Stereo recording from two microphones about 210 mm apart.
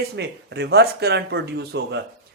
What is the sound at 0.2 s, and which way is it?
Speech, 50° right (ahead or behind).